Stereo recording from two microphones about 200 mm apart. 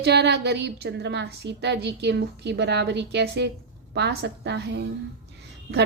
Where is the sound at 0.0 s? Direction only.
55° right (ahead or behind).